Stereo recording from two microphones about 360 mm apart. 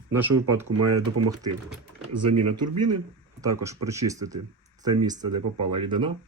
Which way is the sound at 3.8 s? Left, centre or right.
Centre.